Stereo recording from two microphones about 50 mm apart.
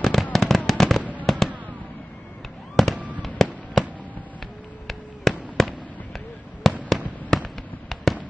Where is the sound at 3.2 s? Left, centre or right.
Centre.